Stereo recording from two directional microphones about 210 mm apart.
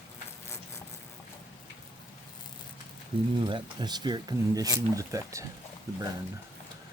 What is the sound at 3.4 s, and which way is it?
Speech, 20° right (ahead or behind).